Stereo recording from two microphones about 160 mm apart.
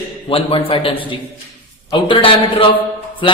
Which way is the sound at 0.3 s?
35° left (ahead or behind).